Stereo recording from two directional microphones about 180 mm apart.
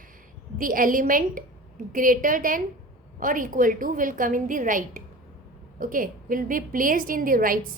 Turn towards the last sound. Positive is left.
turn(degrees=-50)  # may be behind; listen again after turning